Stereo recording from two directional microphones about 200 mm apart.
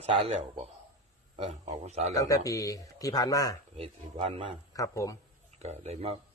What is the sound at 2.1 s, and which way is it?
Speech, 15° left (ahead or behind).